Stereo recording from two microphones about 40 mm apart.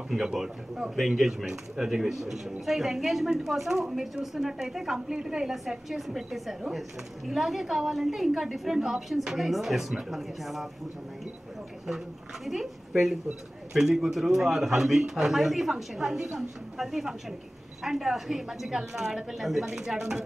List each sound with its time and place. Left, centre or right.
0.1 s a man's voice: centre
5.5 s a woman's voice: centre
12.4 s a woman's voice: centre
19.7 s a man's voice: centre